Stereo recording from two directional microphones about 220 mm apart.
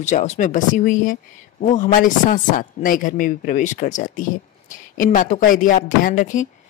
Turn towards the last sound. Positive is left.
turn(degrees=35)  # may be behind; listen again after turning